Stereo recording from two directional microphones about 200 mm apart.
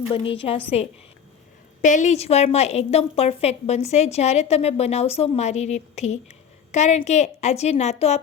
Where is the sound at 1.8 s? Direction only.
40° left (ahead or behind).